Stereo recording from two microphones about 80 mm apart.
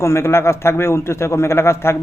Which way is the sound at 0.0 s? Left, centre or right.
Left.